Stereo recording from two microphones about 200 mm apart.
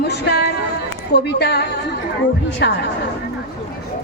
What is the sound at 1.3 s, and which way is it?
A woman's voice, 55° left (ahead or behind).